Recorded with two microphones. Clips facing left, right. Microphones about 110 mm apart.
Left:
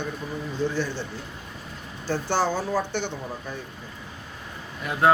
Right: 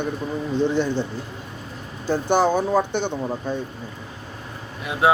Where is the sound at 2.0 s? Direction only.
15° right (ahead or behind).